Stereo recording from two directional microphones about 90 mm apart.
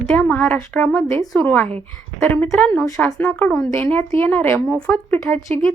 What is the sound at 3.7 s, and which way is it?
Speech, 25° left (ahead or behind).